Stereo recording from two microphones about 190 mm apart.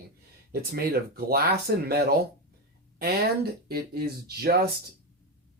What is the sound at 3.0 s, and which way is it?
Speech, 55° right (ahead or behind).